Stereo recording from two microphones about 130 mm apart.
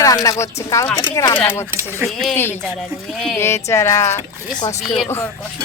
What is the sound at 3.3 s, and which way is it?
Speech, 20° left (ahead or behind).